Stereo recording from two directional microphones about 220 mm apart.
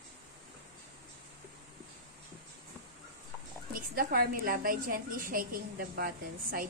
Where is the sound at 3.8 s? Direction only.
40° right (ahead or behind).